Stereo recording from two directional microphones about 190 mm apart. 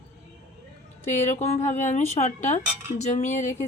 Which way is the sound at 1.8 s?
40° left (ahead or behind).